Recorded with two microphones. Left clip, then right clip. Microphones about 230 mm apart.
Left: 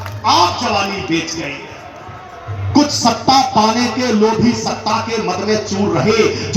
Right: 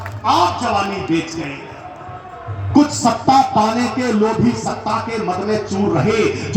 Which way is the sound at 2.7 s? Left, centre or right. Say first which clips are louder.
Left 1 dB; right.